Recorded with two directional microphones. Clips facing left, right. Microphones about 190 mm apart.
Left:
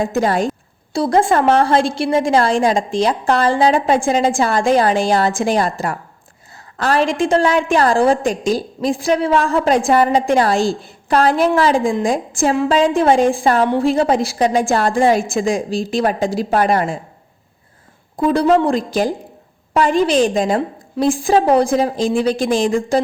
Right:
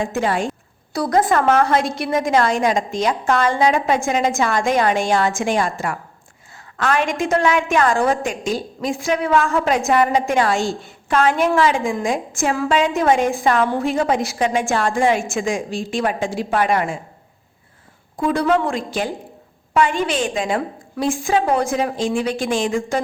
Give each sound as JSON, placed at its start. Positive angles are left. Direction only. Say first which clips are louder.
{"t": 0.0, "sound": "a woman's voice", "louder": "left 4 dB", "side_deg": 40}
{"t": 0.9, "sound": "a woman's voice", "louder": "left 3 dB", "side_deg": 25}
{"t": 18.2, "sound": "a woman's voice", "louder": "left 4 dB", "side_deg": 35}